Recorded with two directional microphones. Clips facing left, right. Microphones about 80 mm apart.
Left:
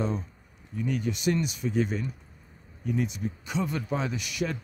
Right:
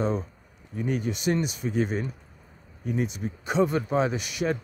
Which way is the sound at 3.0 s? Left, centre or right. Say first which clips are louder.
Right 2 dB; right.